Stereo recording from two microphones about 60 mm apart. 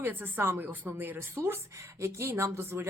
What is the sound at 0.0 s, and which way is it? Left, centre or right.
Speech, right.